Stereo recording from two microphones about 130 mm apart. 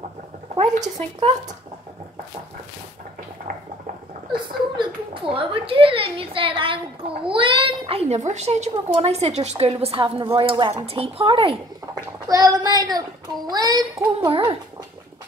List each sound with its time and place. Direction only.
0.6 s speech: 55° right (ahead or behind)
4.3 s a woman's voice: 40° right (ahead or behind)
12.3 s a child's voice: 25° right (ahead or behind)